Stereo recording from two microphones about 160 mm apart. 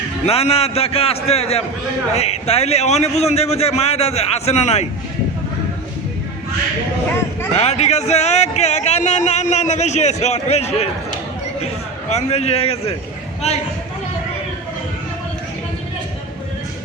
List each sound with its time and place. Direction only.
0.3 s a man's voice: 40° left (ahead or behind)
7.5 s a man's voice: 45° left (ahead or behind)
12.1 s a man's voice: 40° left (ahead or behind)